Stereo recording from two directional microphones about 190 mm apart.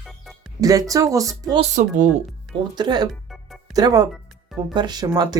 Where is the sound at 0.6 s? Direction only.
20° right (ahead or behind).